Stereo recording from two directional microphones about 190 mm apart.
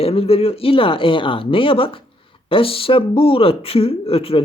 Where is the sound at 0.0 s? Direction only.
30° left (ahead or behind).